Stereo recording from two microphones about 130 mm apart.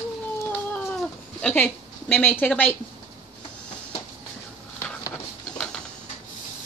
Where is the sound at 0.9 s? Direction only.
10° left (ahead or behind).